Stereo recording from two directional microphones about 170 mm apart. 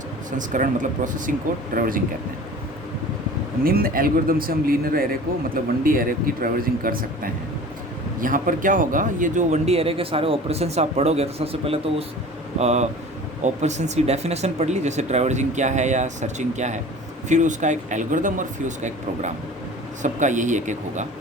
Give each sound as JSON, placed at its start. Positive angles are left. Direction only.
{"t": 0.3, "sound": "speech", "side_deg": -50}
{"t": 3.6, "sound": "a man's voice", "side_deg": -60}
{"t": 8.2, "sound": "speech", "side_deg": -50}